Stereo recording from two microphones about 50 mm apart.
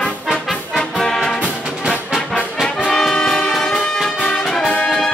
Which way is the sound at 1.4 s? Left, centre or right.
Centre.